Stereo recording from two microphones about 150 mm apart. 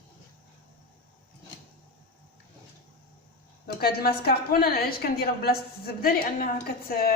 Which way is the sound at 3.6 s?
90° left.